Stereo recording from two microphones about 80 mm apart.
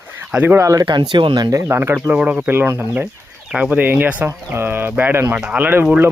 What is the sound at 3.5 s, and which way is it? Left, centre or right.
Speech, centre.